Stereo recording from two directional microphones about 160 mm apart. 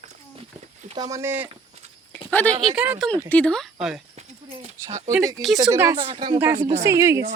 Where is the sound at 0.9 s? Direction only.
20° right (ahead or behind).